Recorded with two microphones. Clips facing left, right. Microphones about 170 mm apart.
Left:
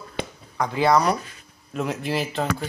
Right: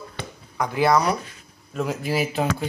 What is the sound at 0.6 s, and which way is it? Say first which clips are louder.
Speech: even; 10° right (ahead or behind).